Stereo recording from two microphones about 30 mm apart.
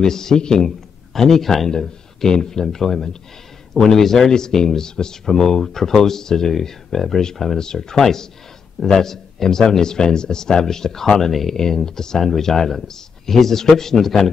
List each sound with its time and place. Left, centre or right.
0.0 s a man's voice: centre
1.7 s speech: left
2.6 s speech: centre